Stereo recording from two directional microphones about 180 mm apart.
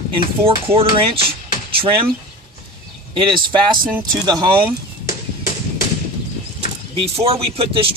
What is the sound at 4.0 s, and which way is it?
Speech, 20° right (ahead or behind).